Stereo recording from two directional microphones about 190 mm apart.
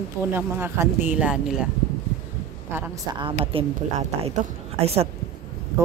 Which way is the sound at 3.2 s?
30° right (ahead or behind).